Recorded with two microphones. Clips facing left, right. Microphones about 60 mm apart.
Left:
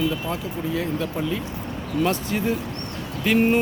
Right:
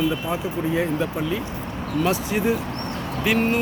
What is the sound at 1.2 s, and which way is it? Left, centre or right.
Speech, centre.